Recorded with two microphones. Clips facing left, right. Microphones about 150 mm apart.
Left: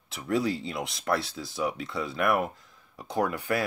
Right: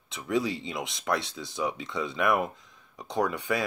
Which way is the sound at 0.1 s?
Centre (ahead or behind).